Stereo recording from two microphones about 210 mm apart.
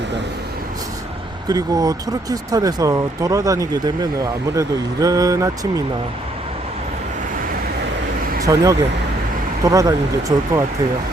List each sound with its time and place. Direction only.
1.5 s speech: 15° right (ahead or behind)
8.5 s speech: 15° right (ahead or behind)
9.6 s speech: 15° right (ahead or behind)